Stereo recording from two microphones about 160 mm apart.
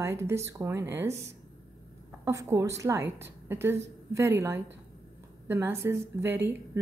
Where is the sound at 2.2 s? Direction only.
20° right (ahead or behind).